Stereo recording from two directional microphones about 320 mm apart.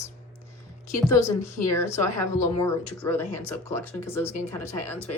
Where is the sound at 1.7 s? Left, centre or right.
Centre.